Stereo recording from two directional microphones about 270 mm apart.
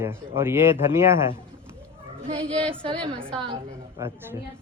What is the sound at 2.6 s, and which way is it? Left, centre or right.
Speech, centre.